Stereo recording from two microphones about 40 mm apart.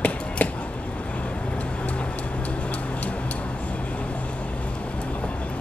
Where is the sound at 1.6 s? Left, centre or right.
Left.